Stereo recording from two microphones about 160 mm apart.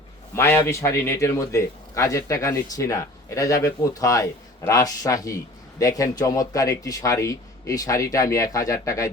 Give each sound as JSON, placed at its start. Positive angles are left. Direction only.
{"t": 0.3, "sound": "a man's voice", "side_deg": 15}